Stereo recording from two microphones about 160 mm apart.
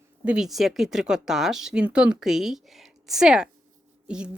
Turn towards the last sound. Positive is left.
turn(degrees=-5)  # may be behind; listen again after turning